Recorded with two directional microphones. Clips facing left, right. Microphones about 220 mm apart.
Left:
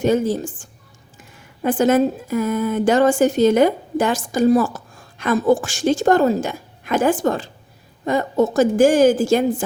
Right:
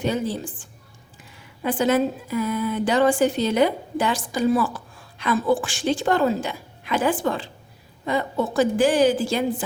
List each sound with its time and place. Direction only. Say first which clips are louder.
0.0 s speech: left 7 dB; 45° left (ahead or behind)